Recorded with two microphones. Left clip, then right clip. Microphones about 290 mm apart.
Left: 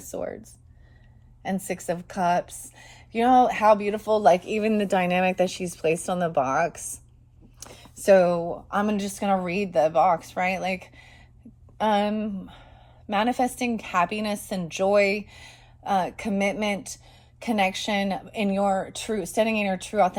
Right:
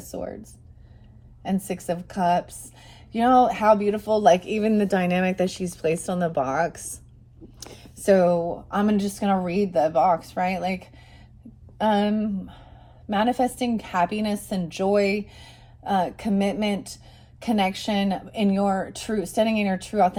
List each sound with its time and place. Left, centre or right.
0.1 s speech: centre
1.6 s a woman's voice: centre